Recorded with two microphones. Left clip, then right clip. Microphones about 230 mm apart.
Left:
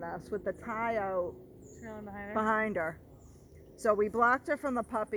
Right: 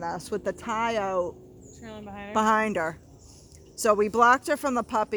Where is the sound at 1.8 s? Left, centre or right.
Right.